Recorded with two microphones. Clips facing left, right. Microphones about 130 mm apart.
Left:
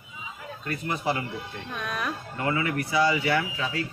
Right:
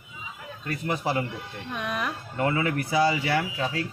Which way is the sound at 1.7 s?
15° right (ahead or behind).